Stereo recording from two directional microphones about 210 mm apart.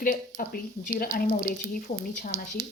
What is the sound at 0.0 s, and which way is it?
Speech, 40° left (ahead or behind).